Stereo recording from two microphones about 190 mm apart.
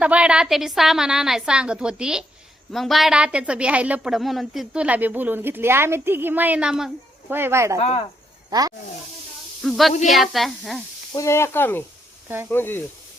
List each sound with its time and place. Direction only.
0.0 s a woman's voice: 5° right (ahead or behind)
7.8 s speech: 30° left (ahead or behind)
8.4 s speech: 20° right (ahead or behind)
9.6 s a woman's voice: centre (ahead or behind)
11.1 s speech: 15° left (ahead or behind)